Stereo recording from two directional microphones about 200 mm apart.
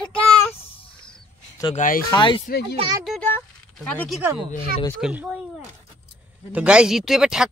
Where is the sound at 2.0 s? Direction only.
25° left (ahead or behind).